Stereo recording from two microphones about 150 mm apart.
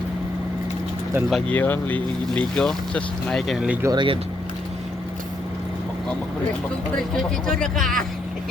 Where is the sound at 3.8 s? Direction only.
30° right (ahead or behind).